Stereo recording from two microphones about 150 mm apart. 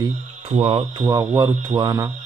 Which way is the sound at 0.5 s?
45° right (ahead or behind).